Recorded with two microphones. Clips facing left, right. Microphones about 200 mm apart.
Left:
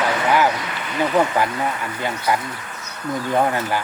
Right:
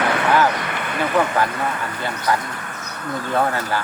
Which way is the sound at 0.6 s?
55° right (ahead or behind).